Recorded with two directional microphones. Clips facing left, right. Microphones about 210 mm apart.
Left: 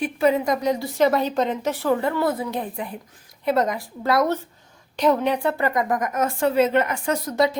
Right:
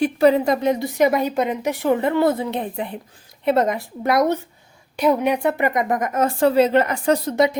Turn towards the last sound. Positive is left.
turn(degrees=-35)  # may be behind; listen again after turning